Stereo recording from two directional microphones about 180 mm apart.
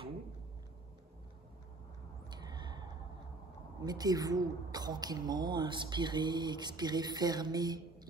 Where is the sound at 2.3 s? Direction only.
25° right (ahead or behind).